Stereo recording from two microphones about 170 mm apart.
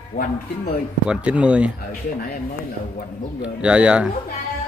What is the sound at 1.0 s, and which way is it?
Speech, 5° right (ahead or behind).